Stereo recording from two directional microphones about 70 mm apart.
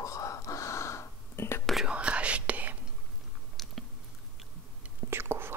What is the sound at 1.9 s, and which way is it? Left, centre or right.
Whispering, centre.